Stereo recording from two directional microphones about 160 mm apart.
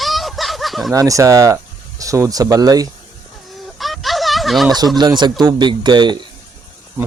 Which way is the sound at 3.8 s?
Centre (ahead or behind).